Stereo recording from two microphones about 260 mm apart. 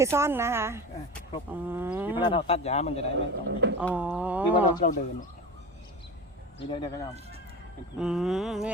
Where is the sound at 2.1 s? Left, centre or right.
Centre.